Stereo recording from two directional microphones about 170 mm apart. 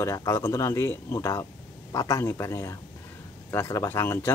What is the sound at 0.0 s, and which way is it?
Speech, 20° left (ahead or behind).